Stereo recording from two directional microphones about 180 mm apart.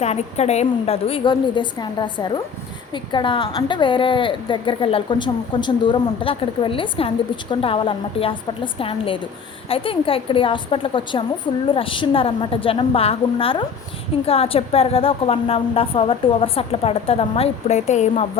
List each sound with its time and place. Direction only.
0.0 s a woman's voice: 35° left (ahead or behind)